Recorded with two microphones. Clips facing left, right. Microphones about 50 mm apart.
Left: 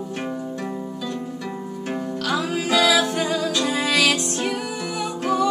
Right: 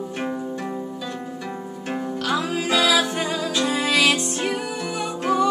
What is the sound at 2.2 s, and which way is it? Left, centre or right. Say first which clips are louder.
Music: even; centre.